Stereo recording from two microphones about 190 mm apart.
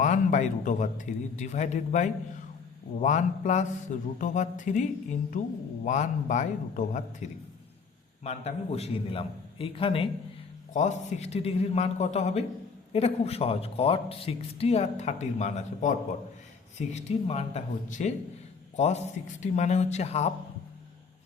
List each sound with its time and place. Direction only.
0.0 s a man's voice: 40° left (ahead or behind)
19.4 s speech: 40° left (ahead or behind)